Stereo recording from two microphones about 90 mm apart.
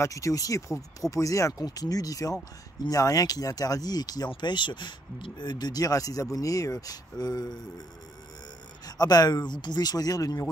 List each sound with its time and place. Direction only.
0.0 s speech: 35° left (ahead or behind)
4.3 s speech: 60° left (ahead or behind)
8.8 s speech: 45° left (ahead or behind)